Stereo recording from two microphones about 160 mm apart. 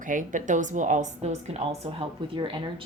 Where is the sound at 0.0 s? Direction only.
55° right (ahead or behind).